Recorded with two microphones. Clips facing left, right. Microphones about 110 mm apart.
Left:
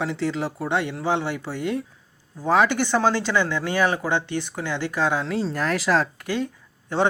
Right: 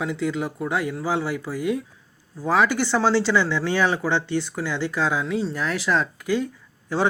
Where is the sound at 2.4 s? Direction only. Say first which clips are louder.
Left 1 dB; 20° left (ahead or behind).